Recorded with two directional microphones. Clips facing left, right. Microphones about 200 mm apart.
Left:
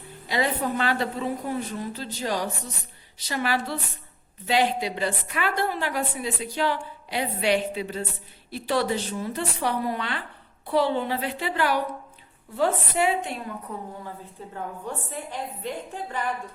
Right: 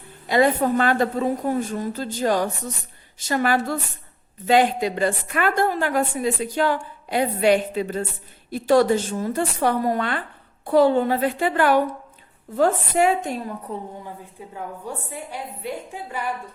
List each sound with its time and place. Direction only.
0.3 s a woman's voice: 50° right (ahead or behind)
13.7 s a woman's voice: 30° right (ahead or behind)
14.5 s a woman's voice: 10° right (ahead or behind)